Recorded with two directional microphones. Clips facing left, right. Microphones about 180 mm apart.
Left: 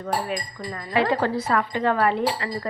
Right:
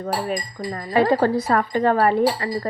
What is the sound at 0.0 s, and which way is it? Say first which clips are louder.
Speech: right 2 dB; 40° right (ahead or behind).